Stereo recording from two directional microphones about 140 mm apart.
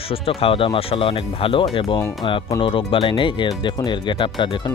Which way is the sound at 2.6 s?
40° left (ahead or behind).